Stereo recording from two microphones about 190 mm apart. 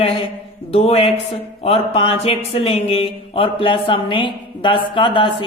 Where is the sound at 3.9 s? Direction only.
25° left (ahead or behind).